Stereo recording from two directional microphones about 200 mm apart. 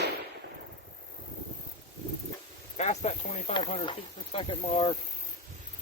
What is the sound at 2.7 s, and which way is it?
Speech, 35° left (ahead or behind).